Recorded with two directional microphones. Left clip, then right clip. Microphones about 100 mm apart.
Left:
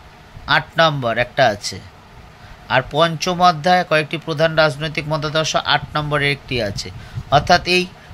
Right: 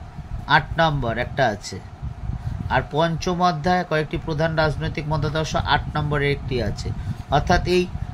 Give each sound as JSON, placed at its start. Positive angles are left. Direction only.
{"t": 0.5, "sound": "speech", "side_deg": 25}